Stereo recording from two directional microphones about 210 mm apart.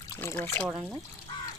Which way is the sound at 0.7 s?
10° right (ahead or behind).